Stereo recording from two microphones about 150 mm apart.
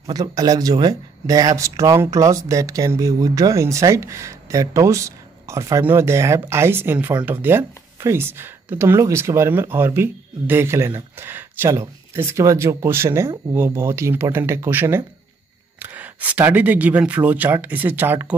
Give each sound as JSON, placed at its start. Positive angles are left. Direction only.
{"t": 0.1, "sound": "speech", "side_deg": -25}